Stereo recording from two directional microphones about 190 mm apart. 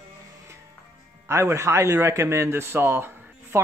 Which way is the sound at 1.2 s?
15° right (ahead or behind).